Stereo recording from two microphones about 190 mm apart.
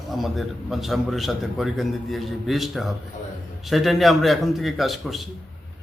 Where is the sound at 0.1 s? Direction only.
Centre (ahead or behind).